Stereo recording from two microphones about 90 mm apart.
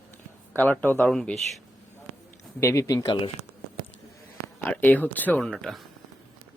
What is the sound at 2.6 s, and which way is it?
Speech, 35° left (ahead or behind).